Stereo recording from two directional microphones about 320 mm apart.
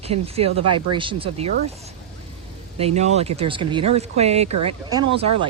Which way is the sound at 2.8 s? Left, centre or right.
Centre.